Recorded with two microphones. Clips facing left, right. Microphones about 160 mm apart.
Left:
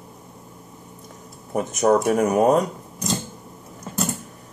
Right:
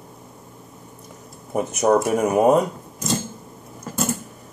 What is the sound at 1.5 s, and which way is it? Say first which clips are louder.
Speech: even; 5° right (ahead or behind).